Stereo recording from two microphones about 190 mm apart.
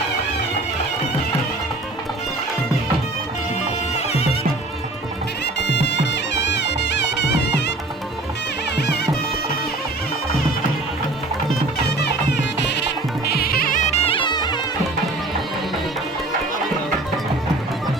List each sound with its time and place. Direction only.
3.9 s music: 35° left (ahead or behind)
5.5 s music: 65° left (ahead or behind)
11.8 s music: 65° left (ahead or behind); by 14.6 s 25° left (ahead or behind)